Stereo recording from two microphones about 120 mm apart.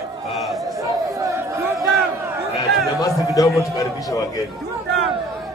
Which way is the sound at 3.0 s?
30° left (ahead or behind).